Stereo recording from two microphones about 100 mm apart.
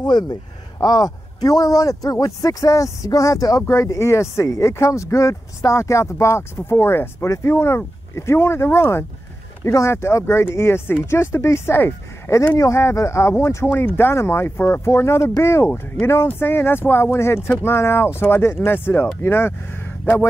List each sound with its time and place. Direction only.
0.0 s a man's voice: 45° left (ahead or behind); by 19.5 s 25° left (ahead or behind)